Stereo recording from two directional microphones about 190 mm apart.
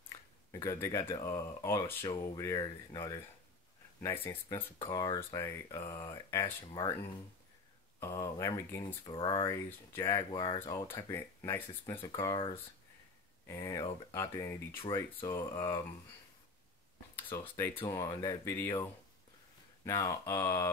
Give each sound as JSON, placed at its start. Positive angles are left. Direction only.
{"t": 0.5, "sound": "speech", "side_deg": 15}
{"t": 8.0, "sound": "speech", "side_deg": 15}
{"t": 10.9, "sound": "speech", "side_deg": 10}
{"t": 12.1, "sound": "speech", "side_deg": 20}
{"t": 17.1, "sound": "speech", "side_deg": 10}